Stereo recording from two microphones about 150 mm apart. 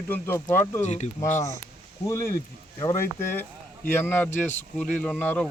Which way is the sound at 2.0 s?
20° left (ahead or behind).